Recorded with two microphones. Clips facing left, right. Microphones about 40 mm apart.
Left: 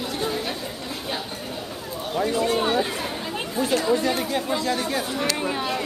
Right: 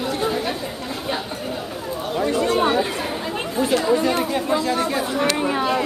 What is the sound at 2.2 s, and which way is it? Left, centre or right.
Speech, centre.